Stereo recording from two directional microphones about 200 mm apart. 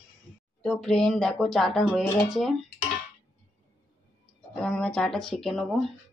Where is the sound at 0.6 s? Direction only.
Centre (ahead or behind).